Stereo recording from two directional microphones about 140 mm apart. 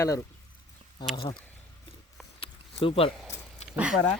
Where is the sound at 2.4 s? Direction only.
40° left (ahead or behind).